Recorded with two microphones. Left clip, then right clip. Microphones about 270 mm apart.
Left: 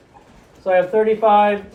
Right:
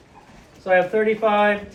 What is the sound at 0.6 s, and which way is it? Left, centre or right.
Speech, centre.